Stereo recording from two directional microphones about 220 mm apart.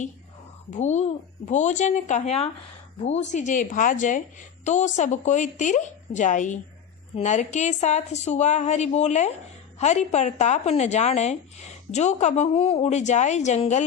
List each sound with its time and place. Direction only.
0.7 s a woman's voice: 30° left (ahead or behind)